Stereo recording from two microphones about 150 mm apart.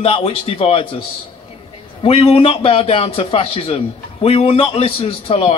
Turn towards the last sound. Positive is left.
turn(degrees=40)  # may be behind; listen again after turning